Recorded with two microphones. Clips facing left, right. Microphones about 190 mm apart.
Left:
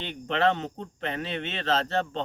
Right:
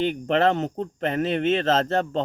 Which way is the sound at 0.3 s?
45° right (ahead or behind).